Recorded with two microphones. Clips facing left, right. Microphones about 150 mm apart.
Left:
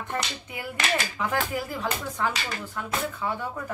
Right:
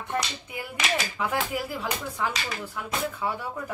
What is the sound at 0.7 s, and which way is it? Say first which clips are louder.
Speech: left 1 dB; 5° right (ahead or behind).